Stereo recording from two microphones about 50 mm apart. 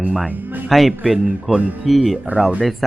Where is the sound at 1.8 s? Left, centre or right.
Centre.